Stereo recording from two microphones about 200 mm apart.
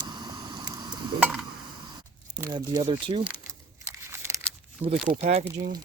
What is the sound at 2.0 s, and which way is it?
Speech, 20° right (ahead or behind).